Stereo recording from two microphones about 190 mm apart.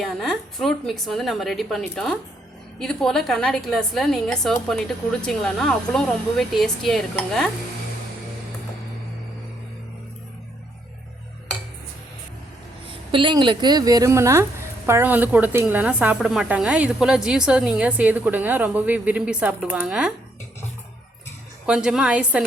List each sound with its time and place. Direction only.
0.0 s speech: centre (ahead or behind)
12.9 s a woman's voice: 25° right (ahead or behind); by 20.1 s 5° right (ahead or behind)
21.7 s speech: 5° right (ahead or behind)